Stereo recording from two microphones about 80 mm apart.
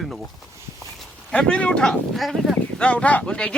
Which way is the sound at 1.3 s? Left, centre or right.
Centre.